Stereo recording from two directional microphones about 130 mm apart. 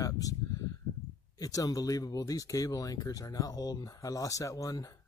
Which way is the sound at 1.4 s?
25° left (ahead or behind).